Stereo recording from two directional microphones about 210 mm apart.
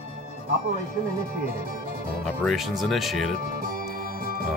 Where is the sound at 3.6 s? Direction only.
45° right (ahead or behind).